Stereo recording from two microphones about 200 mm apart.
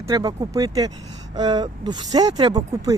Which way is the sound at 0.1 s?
20° right (ahead or behind).